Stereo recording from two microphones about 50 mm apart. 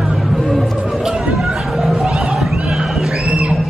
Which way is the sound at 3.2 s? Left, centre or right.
Right.